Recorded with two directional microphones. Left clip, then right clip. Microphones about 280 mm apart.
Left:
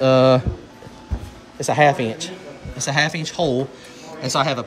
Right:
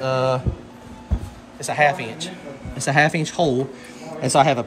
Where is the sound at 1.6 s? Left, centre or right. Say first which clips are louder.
Left 3 dB; left.